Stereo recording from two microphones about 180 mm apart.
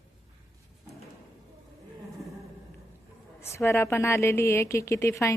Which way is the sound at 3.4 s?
15° left (ahead or behind).